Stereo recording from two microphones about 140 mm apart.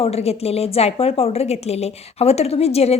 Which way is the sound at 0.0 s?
50° left (ahead or behind).